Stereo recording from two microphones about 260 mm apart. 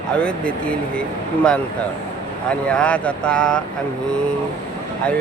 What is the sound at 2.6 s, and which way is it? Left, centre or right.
Speech, centre.